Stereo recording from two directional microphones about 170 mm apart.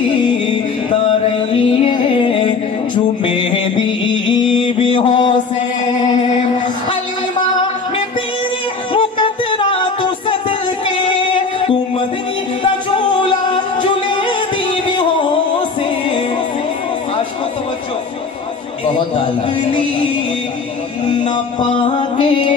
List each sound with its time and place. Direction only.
0.9 s music: 35° left (ahead or behind)
4.3 s mantra: 30° left (ahead or behind)
8.9 s music: 30° left (ahead or behind)
11.1 s music: 30° left (ahead or behind)
13.5 s music: 30° left (ahead or behind)
18.9 s a sound: 30° left (ahead or behind)
21.5 s music: 30° left (ahead or behind)